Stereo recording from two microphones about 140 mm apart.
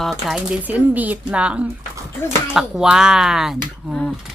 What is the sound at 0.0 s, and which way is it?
Speech, centre (ahead or behind).